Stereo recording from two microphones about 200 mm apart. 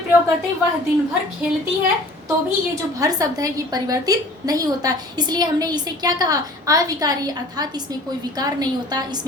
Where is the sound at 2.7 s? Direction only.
15° right (ahead or behind).